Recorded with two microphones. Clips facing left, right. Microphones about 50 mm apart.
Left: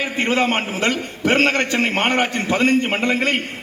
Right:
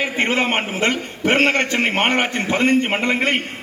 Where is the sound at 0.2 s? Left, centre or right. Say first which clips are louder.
Left 1 dB; right.